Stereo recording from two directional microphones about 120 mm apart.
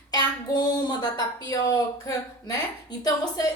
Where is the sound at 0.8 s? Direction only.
35° left (ahead or behind).